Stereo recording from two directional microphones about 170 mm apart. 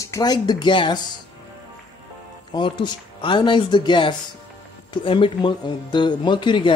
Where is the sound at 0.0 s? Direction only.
20° left (ahead or behind).